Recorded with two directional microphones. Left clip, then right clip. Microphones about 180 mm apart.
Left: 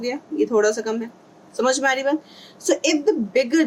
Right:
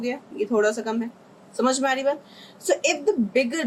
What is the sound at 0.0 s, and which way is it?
Speech, 35° left (ahead or behind).